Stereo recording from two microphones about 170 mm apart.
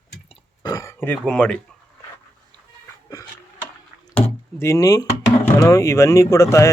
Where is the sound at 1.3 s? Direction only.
5° left (ahead or behind).